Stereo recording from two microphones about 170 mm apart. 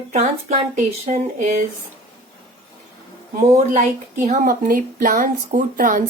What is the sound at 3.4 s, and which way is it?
A woman's voice, 40° right (ahead or behind).